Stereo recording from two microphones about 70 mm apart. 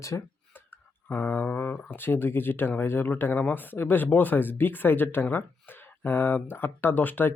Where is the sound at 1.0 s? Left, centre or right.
Left.